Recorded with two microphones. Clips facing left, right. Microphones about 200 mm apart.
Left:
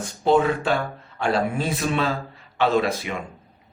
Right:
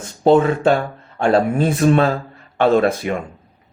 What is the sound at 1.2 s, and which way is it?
Speech, 50° right (ahead or behind).